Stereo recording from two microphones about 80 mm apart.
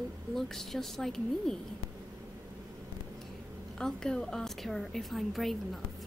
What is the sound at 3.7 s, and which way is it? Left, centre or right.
A woman's voice, centre.